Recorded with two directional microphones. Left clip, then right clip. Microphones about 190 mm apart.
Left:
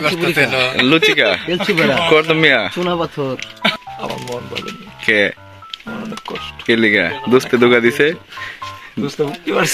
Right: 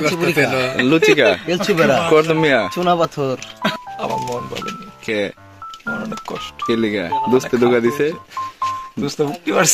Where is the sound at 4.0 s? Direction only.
20° right (ahead or behind).